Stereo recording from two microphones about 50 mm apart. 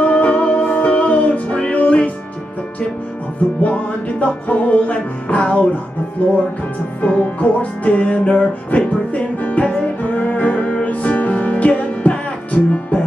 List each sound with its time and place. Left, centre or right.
0.0 s music: left
3.6 s music: left